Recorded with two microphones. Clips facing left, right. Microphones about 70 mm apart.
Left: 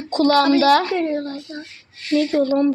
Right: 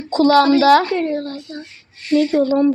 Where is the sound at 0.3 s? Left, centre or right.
Right.